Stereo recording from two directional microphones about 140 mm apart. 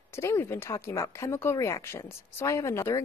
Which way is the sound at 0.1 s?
20° left (ahead or behind).